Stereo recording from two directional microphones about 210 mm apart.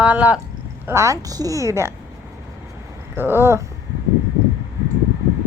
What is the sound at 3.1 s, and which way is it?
Speech, 10° right (ahead or behind).